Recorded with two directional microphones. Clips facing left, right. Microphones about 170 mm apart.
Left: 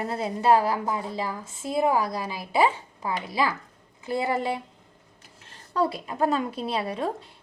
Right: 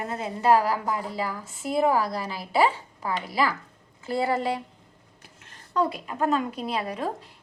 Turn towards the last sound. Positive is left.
turn(degrees=30)  # may be behind; listen again after turning